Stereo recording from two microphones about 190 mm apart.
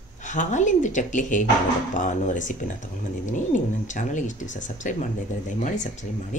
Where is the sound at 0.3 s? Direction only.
40° left (ahead or behind).